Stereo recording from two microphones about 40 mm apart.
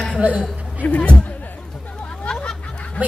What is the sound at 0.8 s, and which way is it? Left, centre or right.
Speech, left.